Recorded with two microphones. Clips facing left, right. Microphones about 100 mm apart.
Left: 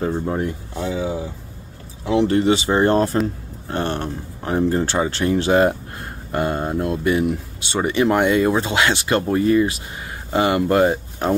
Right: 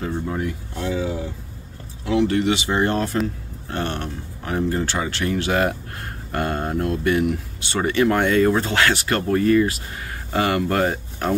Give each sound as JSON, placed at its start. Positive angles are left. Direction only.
{"t": 0.0, "sound": "speech", "side_deg": 30}
{"t": 0.7, "sound": "speech", "side_deg": 20}